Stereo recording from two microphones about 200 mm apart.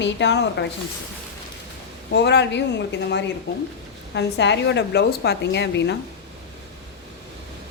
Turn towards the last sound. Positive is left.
turn(degrees=60)  # may be behind; listen again after turning